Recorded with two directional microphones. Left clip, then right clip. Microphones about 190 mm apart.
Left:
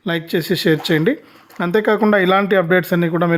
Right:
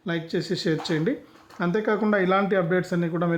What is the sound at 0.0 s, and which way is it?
Speech, 30° left (ahead or behind).